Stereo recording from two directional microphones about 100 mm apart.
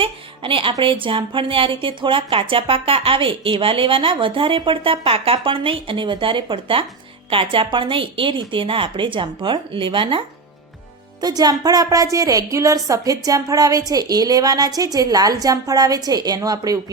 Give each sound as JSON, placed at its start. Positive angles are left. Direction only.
{"t": 0.0, "sound": "speech", "side_deg": -60}
{"t": 11.2, "sound": "a woman's voice", "side_deg": -40}